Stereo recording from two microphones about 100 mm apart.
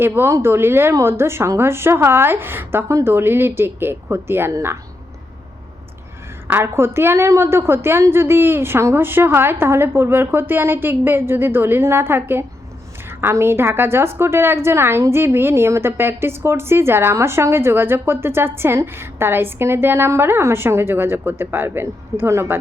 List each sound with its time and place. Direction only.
0.0 s a woman's voice: 20° right (ahead or behind)
6.5 s a woman's voice: 25° right (ahead or behind)